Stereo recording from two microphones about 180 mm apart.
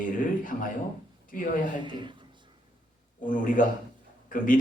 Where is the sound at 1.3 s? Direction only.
50° left (ahead or behind).